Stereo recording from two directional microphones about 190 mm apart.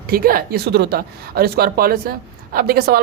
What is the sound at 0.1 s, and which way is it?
Speech, 50° right (ahead or behind).